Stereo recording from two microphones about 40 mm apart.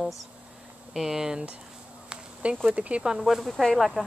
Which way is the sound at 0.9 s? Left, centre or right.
Centre.